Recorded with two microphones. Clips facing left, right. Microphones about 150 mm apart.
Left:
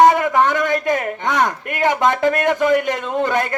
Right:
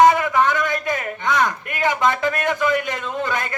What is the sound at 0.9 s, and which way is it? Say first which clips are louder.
A man's voice: left 2 dB; 50° left (ahead or behind).